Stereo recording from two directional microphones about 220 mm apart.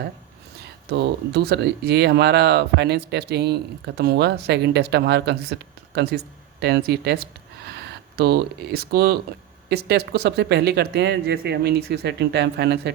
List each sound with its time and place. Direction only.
0.9 s speech: 50° right (ahead or behind)